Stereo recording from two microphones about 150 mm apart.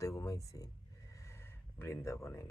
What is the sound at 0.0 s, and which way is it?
Speech, 20° left (ahead or behind).